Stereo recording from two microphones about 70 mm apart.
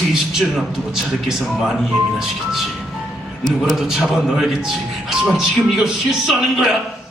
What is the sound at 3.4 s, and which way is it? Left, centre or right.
A man's voice, centre.